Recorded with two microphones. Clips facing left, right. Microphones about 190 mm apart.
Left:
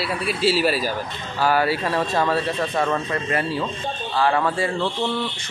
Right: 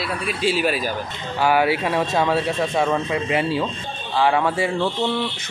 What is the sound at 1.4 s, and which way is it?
Speech, 15° right (ahead or behind).